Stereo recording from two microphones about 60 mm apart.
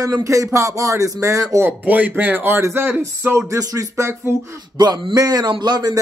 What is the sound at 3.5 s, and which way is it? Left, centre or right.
Speech, right.